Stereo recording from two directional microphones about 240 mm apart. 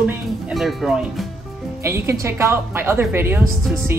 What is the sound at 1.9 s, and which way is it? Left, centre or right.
A woman's voice, centre.